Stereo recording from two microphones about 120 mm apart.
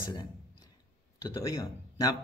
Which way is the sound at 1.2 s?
25° left (ahead or behind).